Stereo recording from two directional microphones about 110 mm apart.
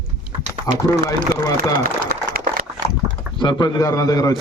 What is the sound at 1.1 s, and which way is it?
Speech, 35° left (ahead or behind).